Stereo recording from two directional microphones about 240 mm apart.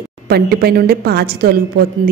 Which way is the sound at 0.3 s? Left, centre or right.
Right.